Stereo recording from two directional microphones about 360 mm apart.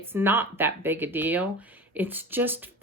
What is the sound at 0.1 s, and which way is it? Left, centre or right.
Speech, centre.